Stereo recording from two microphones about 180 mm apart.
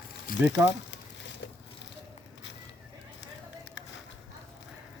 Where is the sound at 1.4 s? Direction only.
80° left.